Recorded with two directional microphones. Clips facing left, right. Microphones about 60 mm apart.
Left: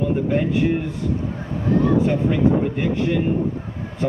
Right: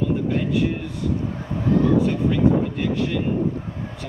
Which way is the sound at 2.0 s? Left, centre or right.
Left.